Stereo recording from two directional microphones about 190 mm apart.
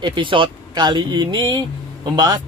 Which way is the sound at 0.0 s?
25° right (ahead or behind).